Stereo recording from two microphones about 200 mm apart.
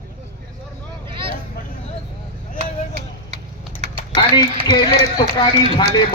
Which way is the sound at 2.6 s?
30° right (ahead or behind).